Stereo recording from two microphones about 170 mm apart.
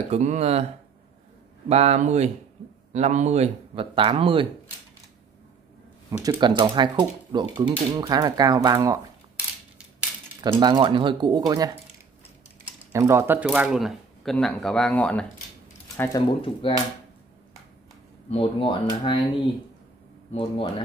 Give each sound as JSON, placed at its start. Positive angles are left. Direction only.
{"t": 0.1, "sound": "speech", "side_deg": -40}
{"t": 1.7, "sound": "speech", "side_deg": -40}
{"t": 6.0, "sound": "speech", "side_deg": -20}
{"t": 10.4, "sound": "speech", "side_deg": -25}
{"t": 12.9, "sound": "speech", "side_deg": -15}
{"t": 16.3, "sound": "speech", "side_deg": 30}
{"t": 18.3, "sound": "speech", "side_deg": 30}